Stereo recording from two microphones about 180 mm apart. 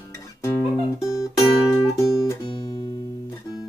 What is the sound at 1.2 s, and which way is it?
Music, 20° left (ahead or behind).